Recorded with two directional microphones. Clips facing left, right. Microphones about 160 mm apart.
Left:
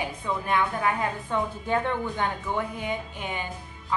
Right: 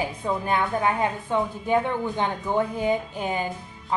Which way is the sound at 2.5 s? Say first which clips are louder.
Right 7 dB; 35° right (ahead or behind).